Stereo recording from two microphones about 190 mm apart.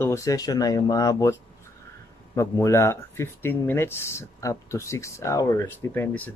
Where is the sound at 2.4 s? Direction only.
15° left (ahead or behind).